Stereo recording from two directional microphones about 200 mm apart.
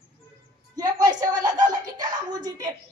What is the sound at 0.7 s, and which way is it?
Speech, 20° right (ahead or behind).